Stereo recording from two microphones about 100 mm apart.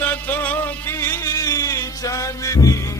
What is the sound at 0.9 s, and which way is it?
Music, 30° left (ahead or behind).